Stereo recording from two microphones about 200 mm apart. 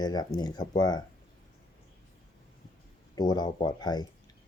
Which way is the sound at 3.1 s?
20° left (ahead or behind).